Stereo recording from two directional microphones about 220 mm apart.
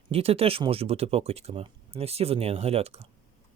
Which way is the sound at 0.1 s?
25° right (ahead or behind).